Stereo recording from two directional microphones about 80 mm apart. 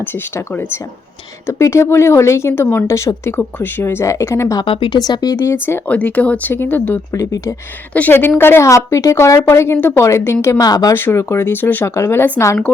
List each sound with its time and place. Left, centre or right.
1.5 s a woman's voice: left
2.5 s speech: left
2.8 s a woman's voice: left
3.2 s speech: left
4.0 s a woman's voice: left
4.6 s speech: left
4.9 s speech: left
5.9 s speech: centre
7.1 s a woman's voice: left
7.9 s a woman's voice: left
10.6 s speech: left
10.9 s a woman's voice: left